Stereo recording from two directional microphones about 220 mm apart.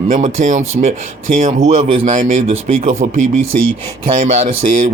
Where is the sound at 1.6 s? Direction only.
30° right (ahead or behind).